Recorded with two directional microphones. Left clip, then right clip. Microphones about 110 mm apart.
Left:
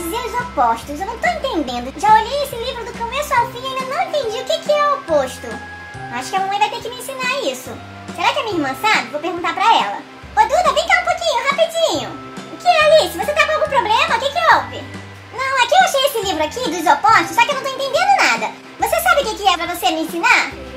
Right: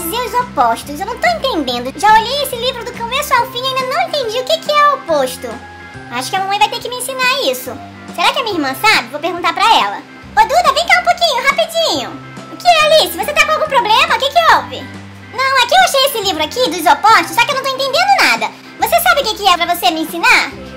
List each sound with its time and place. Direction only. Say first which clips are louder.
0.1 s a child's voice: right 7 dB; 30° right (ahead or behind)